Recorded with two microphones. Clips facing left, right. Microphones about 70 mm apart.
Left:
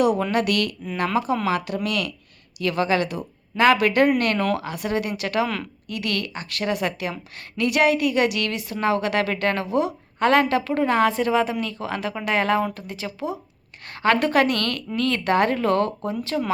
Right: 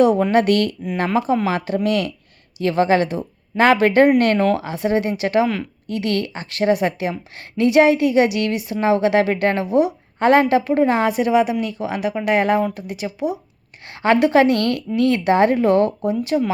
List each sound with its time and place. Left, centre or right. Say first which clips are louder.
0.0 s a woman's voice: right 6 dB; right